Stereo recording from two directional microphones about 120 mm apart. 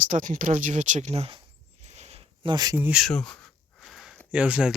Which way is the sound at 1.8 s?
65° right (ahead or behind).